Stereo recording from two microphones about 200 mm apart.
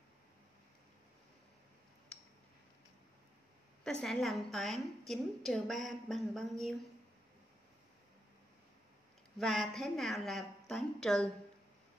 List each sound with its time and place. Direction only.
4.0 s a woman's voice: centre (ahead or behind)
9.4 s a woman's voice: centre (ahead or behind)